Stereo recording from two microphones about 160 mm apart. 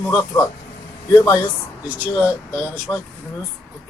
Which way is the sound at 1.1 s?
20° left (ahead or behind).